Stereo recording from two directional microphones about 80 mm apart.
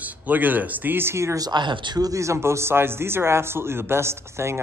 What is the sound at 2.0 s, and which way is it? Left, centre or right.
Speech, right.